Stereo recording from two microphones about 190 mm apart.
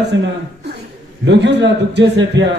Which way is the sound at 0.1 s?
70° right (ahead or behind).